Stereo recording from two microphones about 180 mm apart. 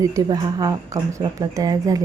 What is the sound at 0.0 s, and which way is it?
Speech, 20° right (ahead or behind).